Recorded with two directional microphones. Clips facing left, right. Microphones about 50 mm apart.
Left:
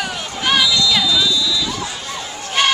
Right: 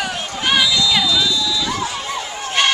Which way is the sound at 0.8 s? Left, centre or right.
Centre.